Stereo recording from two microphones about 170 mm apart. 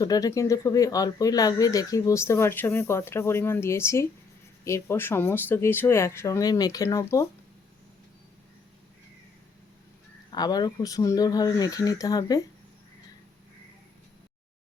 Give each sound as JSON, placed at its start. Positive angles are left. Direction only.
{"t": 0.0, "sound": "speech", "side_deg": 20}
{"t": 10.3, "sound": "speech", "side_deg": 25}